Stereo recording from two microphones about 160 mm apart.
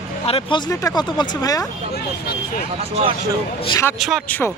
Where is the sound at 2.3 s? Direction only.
60° left (ahead or behind).